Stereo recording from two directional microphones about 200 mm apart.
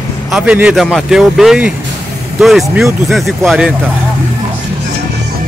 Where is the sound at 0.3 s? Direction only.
5° right (ahead or behind).